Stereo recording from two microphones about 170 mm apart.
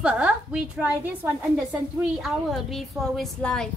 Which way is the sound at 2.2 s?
Centre (ahead or behind).